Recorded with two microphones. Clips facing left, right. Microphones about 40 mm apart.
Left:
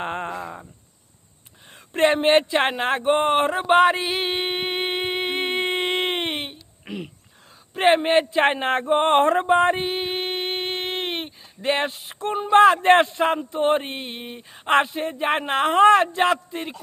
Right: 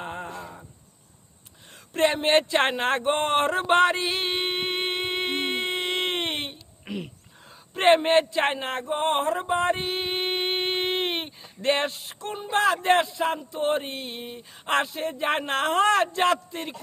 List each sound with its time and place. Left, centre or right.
0.0 s a sound: left
1.9 s speech: left
2.4 s speech: centre
5.6 s a sound: left; by 7.1 s centre
7.7 s speech: centre
8.4 s speech: left
9.4 s speech: left
9.7 s a sound: centre
12.2 s speech: left; by 16.7 s centre